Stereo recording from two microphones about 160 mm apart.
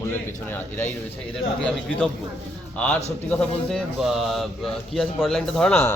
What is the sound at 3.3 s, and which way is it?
A man's voice, 5° left (ahead or behind).